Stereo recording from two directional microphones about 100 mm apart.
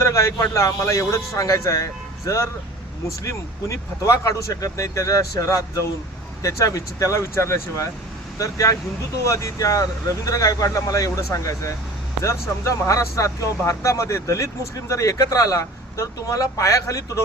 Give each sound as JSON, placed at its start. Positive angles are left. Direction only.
{"t": 0.0, "sound": "speech", "side_deg": 30}